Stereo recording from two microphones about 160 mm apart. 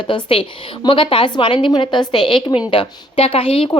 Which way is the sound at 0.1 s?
35° left (ahead or behind).